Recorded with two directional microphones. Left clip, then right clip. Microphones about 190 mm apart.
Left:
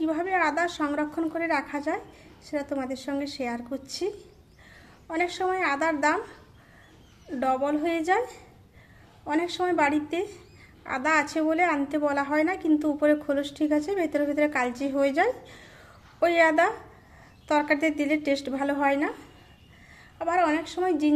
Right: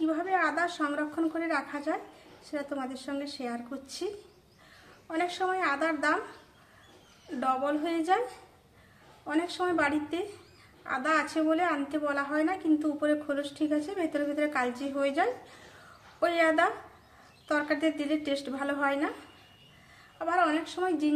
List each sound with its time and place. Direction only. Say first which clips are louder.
0.0 s a woman's voice: left 3 dB; 35° left (ahead or behind)
5.1 s a woman's voice: left 3 dB; 30° left (ahead or behind)
7.3 s a woman's voice: left 3 dB; 30° left (ahead or behind)
20.2 s a woman's voice: left 3 dB; 30° left (ahead or behind)